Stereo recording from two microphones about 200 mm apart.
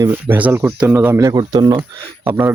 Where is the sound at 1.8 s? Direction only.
10° right (ahead or behind).